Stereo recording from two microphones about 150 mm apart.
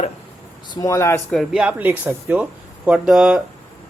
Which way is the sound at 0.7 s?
25° left (ahead or behind).